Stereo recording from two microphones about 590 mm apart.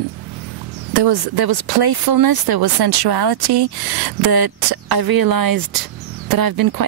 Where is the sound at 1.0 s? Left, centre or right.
Right.